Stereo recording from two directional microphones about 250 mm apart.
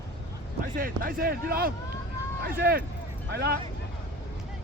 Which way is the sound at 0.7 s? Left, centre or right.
Right.